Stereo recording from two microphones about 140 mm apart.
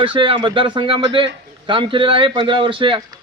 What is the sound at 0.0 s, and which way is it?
A man's voice, 35° right (ahead or behind).